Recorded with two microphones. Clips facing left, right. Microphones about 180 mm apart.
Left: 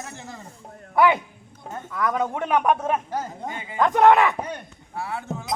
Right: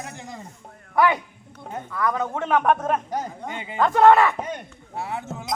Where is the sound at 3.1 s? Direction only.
20° right (ahead or behind).